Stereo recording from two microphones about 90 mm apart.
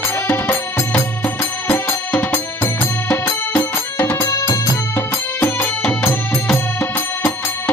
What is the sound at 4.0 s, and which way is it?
Music, 30° left (ahead or behind).